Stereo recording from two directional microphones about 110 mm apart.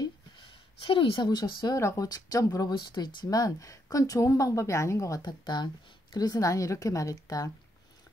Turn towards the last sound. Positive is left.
turn(degrees=35)  # may be behind; listen again after turning